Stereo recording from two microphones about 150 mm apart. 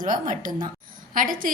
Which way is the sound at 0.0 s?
60° right (ahead or behind).